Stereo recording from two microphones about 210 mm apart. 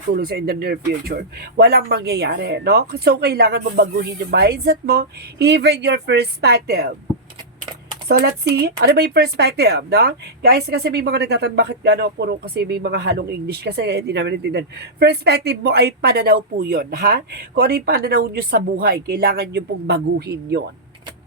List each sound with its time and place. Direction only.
0.1 s speech: 45° right (ahead or behind)
8.0 s speech: 50° right (ahead or behind)